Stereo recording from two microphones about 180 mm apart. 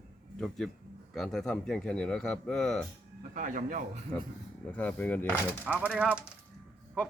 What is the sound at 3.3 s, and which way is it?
Speech, 45° right (ahead or behind).